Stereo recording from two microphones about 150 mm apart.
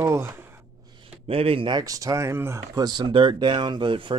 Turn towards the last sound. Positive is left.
turn(degrees=-35)  # may be behind; listen again after turning